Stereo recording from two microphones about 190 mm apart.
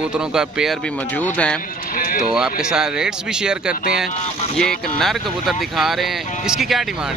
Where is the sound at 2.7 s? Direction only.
5° right (ahead or behind).